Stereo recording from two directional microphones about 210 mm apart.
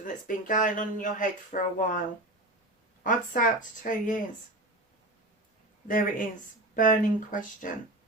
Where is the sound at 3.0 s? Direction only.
40° left (ahead or behind).